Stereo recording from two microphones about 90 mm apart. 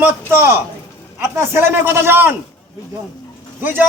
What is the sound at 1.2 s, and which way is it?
A man's voice, 30° right (ahead or behind).